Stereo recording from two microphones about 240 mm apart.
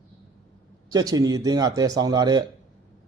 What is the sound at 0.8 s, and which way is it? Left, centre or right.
Speech, centre.